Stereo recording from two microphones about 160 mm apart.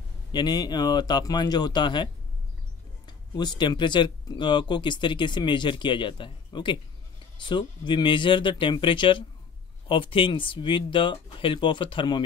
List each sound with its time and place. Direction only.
0.3 s speech: 25° left (ahead or behind)
3.1 s speech: 25° left (ahead or behind)